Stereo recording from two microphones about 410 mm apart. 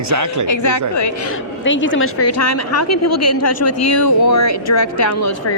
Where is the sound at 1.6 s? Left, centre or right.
Left.